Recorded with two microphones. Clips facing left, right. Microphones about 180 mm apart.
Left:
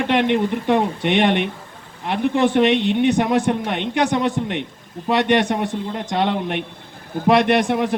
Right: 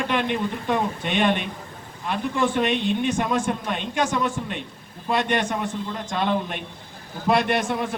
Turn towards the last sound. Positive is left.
turn(degrees=65)  # may be behind; listen again after turning